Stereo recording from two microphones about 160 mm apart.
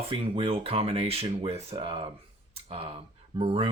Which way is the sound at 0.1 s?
35° right (ahead or behind).